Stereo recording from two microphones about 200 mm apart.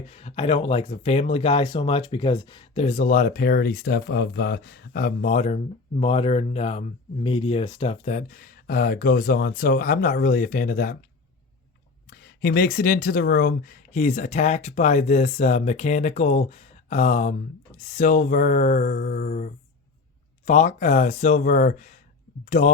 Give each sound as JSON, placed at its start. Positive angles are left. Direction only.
{"t": 0.1, "sound": "speech", "side_deg": 30}
{"t": 12.1, "sound": "speech", "side_deg": 50}